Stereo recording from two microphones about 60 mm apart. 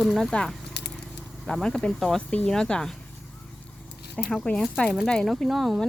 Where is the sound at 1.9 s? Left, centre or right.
Centre.